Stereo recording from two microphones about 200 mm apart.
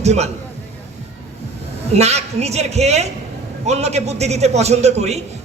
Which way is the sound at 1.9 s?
30° right (ahead or behind).